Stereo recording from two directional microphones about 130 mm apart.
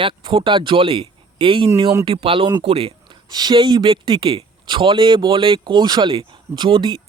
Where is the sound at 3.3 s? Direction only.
30° right (ahead or behind).